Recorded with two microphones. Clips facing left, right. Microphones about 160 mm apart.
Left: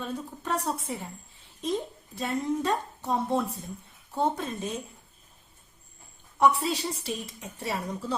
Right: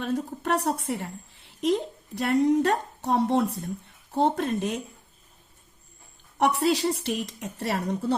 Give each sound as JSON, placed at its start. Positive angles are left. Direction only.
{"t": 0.0, "sound": "a woman's voice", "side_deg": -70}
{"t": 6.4, "sound": "a woman's voice", "side_deg": -70}